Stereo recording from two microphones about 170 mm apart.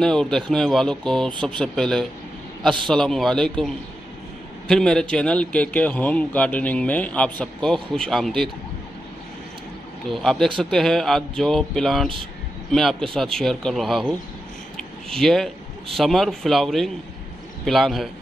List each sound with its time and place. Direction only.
0.0 s speech: 5° left (ahead or behind)
1.3 s speech: 30° right (ahead or behind)
1.6 s speech: 5° left (ahead or behind)
10.1 s speech: centre (ahead or behind)